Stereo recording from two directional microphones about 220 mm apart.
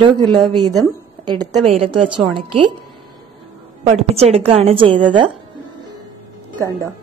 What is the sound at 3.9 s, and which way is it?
Speech, 30° right (ahead or behind).